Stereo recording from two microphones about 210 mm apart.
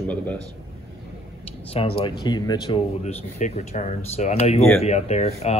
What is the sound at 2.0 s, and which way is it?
A man's voice, 20° left (ahead or behind).